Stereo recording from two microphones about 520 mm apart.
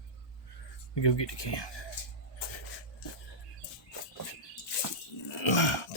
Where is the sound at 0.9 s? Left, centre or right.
Left.